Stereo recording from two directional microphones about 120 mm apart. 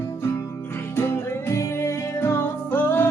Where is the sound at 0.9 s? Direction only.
20° left (ahead or behind).